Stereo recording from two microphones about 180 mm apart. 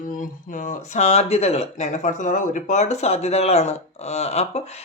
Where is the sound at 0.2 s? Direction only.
45° left (ahead or behind).